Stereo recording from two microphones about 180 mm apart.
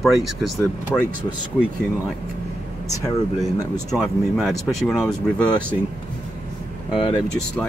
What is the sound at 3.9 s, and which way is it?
Speech, centre (ahead or behind).